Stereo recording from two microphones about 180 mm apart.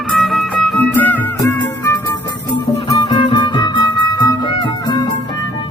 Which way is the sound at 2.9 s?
25° left (ahead or behind).